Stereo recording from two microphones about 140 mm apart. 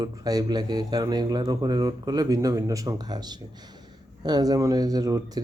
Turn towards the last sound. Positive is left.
turn(degrees=-25)  # may be behind; listen again after turning